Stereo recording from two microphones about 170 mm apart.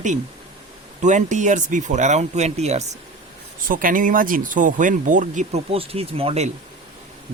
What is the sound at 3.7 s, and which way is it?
Speech, 55° right (ahead or behind).